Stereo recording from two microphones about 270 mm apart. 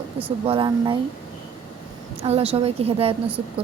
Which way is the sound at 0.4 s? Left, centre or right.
Centre.